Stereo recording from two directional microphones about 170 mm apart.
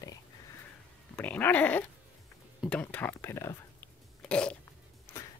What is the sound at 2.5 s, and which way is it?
Speech, 5° left (ahead or behind).